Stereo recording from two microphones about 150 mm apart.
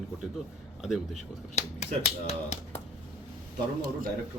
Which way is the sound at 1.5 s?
45° left (ahead or behind).